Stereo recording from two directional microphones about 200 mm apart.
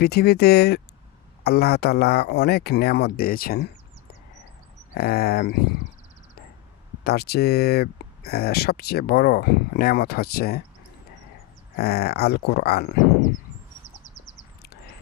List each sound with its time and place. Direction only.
0.0 s speech: 55° left (ahead or behind)
4.9 s speech: 50° left (ahead or behind)
7.0 s speech: 50° left (ahead or behind)
11.8 s speech: 50° left (ahead or behind)